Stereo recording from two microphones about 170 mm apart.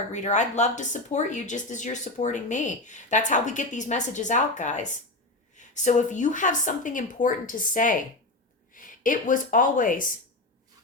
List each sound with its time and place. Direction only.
0.1 s speech: 45° left (ahead or behind)